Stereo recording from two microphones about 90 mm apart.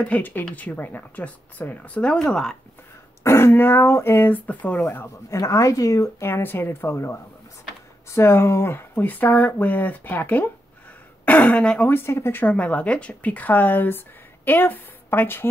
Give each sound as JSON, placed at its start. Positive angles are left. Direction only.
{"t": 0.0, "sound": "speech", "side_deg": 20}
{"t": 3.3, "sound": "speech", "side_deg": 30}
{"t": 11.9, "sound": "speech", "side_deg": 30}